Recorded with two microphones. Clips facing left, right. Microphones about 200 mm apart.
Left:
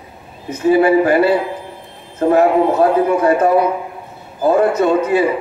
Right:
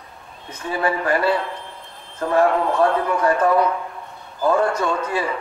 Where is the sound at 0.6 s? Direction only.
25° left (ahead or behind).